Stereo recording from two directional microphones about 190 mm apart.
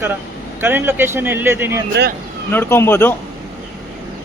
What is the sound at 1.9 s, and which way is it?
Speech, 60° right (ahead or behind).